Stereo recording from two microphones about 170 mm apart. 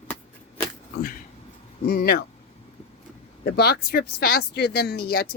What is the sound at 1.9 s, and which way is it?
Speech, 60° left (ahead or behind).